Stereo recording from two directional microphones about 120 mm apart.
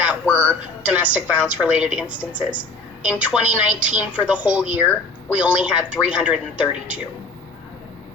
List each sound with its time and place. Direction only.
0.3 s a woman's voice: 15° left (ahead or behind)
0.8 s a woman's voice: 10° right (ahead or behind)